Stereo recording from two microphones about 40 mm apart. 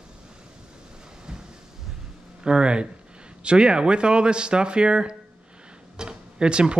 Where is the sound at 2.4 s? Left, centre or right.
Right.